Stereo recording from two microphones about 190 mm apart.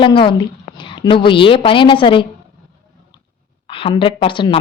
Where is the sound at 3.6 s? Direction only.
30° left (ahead or behind).